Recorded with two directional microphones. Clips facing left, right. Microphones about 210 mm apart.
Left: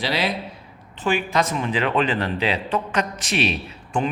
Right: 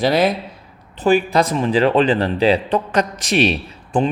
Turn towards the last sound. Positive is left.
turn(degrees=-35)  # may be behind; listen again after turning